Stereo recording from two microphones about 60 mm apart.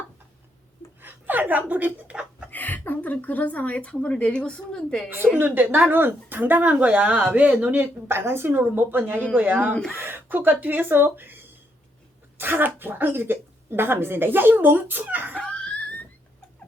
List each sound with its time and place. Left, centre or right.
1.0 s speech: right
2.5 s a woman's voice: left; by 5.0 s centre
5.4 s speech: right
9.9 s speech: right
15.1 s laughter: right
15.4 s laughter: centre